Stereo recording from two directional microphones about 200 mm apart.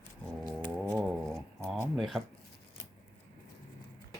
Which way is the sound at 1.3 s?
5° left (ahead or behind).